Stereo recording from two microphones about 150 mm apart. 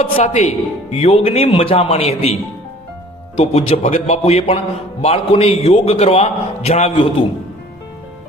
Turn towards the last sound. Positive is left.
turn(degrees=45)  # may be behind; listen again after turning